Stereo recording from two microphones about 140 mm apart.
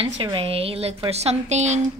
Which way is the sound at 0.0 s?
40° right (ahead or behind).